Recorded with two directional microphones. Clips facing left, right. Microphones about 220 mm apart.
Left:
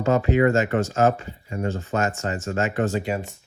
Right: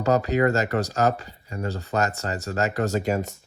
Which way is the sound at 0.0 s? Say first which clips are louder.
Left 2 dB; 40° right (ahead or behind).